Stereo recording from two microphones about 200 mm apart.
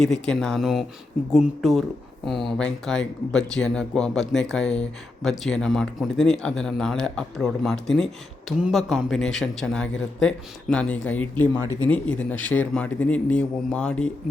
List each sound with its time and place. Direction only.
0.0 s a man's voice: centre (ahead or behind)